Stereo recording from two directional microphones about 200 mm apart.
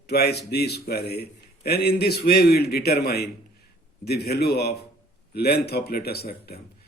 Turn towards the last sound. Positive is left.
turn(degrees=50)  # may be behind; listen again after turning